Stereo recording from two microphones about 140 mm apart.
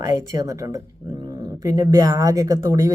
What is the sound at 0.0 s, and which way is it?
Speech, 25° right (ahead or behind).